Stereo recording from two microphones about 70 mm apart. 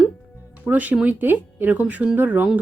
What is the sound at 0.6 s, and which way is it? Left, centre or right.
Speech, right.